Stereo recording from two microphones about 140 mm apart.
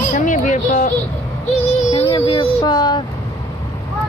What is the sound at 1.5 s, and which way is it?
Speech, 50° left (ahead or behind).